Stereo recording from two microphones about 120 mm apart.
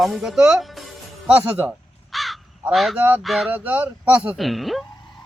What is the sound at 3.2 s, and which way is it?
Speech, centre (ahead or behind).